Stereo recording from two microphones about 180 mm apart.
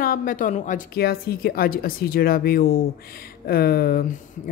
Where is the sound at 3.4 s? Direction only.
55° left (ahead or behind).